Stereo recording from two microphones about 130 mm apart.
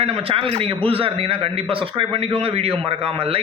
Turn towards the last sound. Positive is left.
turn(degrees=-45)  # may be behind; listen again after turning